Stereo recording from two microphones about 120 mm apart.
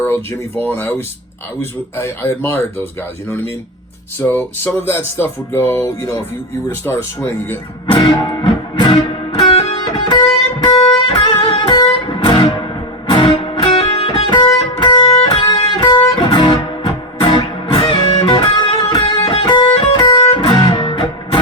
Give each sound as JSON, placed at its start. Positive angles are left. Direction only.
{"t": 0.0, "sound": "music", "side_deg": 20}
{"t": 4.2, "sound": "music", "side_deg": 15}
{"t": 7.9, "sound": "music", "side_deg": 40}
{"t": 8.9, "sound": "music", "side_deg": 55}
{"t": 10.6, "sound": "music", "side_deg": 40}
{"t": 14.6, "sound": "guitar", "side_deg": 40}
{"t": 16.1, "sound": "music", "side_deg": 45}